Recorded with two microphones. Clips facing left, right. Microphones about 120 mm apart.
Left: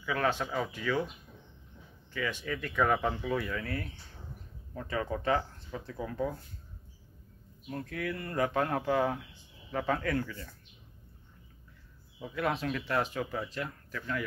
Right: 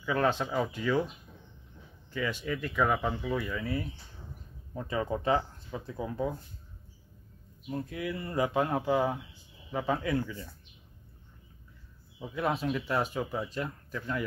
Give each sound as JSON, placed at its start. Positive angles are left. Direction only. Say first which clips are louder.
{"t": 0.0, "sound": "speech", "louder": "right 2 dB", "side_deg": -15}
{"t": 2.4, "sound": "speech", "louder": "even", "side_deg": -10}
{"t": 7.6, "sound": "speech", "louder": "right 1 dB", "side_deg": -15}
{"t": 12.2, "sound": "speech", "louder": "right 1 dB", "side_deg": -15}